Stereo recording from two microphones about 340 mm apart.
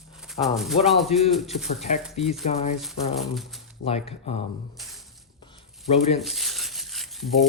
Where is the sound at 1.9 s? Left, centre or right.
Centre.